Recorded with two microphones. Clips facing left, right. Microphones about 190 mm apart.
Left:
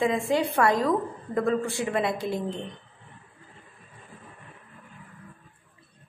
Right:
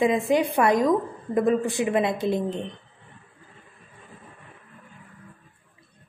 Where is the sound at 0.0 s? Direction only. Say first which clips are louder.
Right 3 dB; 20° right (ahead or behind).